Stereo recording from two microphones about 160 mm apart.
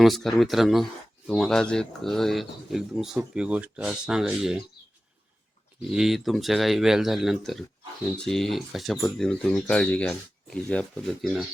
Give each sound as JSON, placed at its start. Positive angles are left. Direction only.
{"t": 0.0, "sound": "speech", "side_deg": 0}
{"t": 5.9, "sound": "speech", "side_deg": 0}